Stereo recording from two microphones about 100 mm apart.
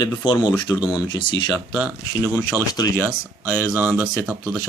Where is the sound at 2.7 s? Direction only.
40° left (ahead or behind).